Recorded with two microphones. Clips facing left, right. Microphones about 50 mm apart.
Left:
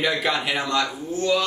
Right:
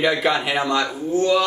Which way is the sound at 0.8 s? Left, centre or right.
Centre.